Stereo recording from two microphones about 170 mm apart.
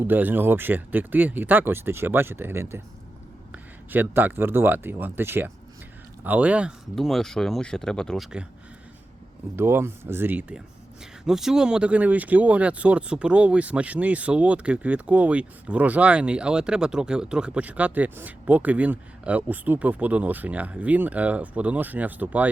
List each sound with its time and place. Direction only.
0.0 s speech: 10° right (ahead or behind)
9.6 s speech: 15° right (ahead or behind)